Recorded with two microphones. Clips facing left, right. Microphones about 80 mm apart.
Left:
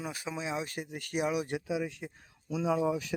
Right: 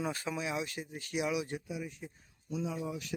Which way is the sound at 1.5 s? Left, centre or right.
Left.